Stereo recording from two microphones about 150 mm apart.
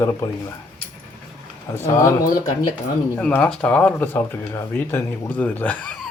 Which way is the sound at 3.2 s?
5° left (ahead or behind).